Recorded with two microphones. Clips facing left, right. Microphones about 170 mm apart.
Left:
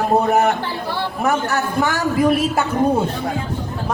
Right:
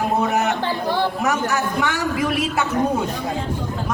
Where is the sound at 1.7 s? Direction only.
40° left (ahead or behind).